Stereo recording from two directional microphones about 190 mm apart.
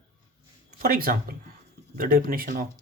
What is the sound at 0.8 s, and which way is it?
Speech, 50° right (ahead or behind).